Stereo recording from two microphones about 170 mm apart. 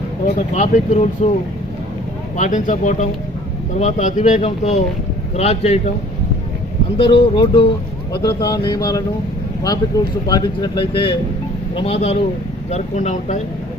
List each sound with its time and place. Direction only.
0.5 s speech: 40° left (ahead or behind)
2.3 s speech: 45° left (ahead or behind)
6.9 s speech: 30° left (ahead or behind)